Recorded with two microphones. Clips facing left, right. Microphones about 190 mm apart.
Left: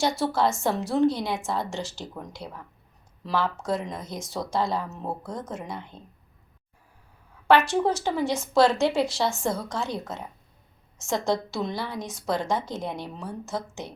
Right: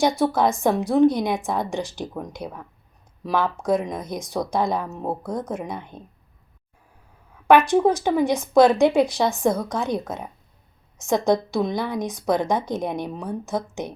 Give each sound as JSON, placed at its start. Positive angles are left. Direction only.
{"t": 0.0, "sound": "a woman's voice", "side_deg": -15}
{"t": 7.4, "sound": "a woman's voice", "side_deg": -15}